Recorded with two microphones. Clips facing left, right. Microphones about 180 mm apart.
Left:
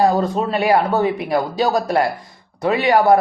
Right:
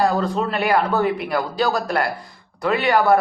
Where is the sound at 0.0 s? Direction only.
20° left (ahead or behind).